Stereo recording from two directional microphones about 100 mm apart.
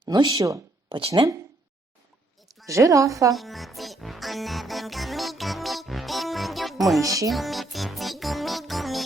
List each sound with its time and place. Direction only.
0.0 s speech: 50° right (ahead or behind)
0.3 s a woman's voice: 35° right (ahead or behind)
0.9 s speech: 60° right (ahead or behind)
2.6 s a woman's voice: 30° right (ahead or behind)
3.3 s music: centre (ahead or behind)
7.0 s a woman's voice: 35° right (ahead or behind)
7.3 s music: centre (ahead or behind)